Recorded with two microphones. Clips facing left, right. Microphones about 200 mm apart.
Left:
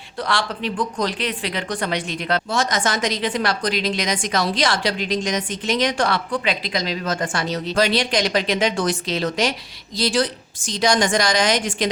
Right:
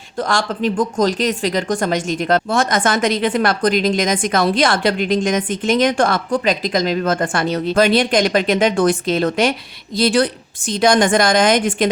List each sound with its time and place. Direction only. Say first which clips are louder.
0.2 s speech: right 5 dB; 45° right (ahead or behind)